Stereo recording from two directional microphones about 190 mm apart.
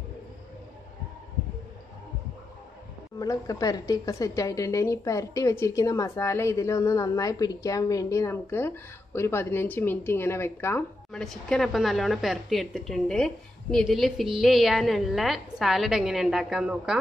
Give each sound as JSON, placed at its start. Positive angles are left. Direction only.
{"t": 3.2, "sound": "a woman's voice", "side_deg": 20}
{"t": 11.1, "sound": "a woman's voice", "side_deg": 5}